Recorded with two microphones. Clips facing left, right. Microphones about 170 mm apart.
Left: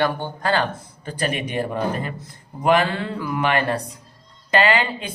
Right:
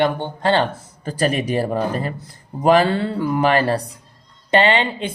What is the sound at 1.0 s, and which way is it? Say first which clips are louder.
Speech: right 5 dB; 40° right (ahead or behind).